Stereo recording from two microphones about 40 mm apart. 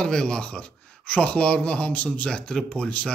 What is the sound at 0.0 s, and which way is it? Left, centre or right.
A man's voice, centre.